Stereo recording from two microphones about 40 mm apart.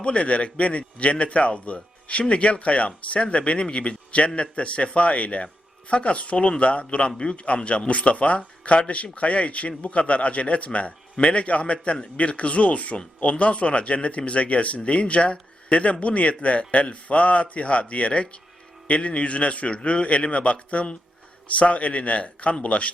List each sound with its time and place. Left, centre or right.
0.0 s a man's voice: left